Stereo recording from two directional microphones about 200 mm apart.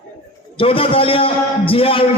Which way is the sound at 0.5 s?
25° left (ahead or behind).